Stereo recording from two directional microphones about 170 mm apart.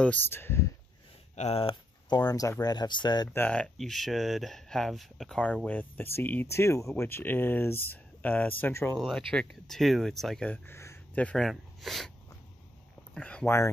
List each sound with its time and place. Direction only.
0.0 s speech: 10° left (ahead or behind)
1.3 s speech: 40° left (ahead or behind)
3.3 s speech: 10° left (ahead or behind)
13.1 s speech: 5° left (ahead or behind)